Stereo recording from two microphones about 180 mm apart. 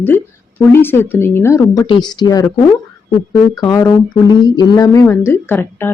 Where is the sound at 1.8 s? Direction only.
25° left (ahead or behind).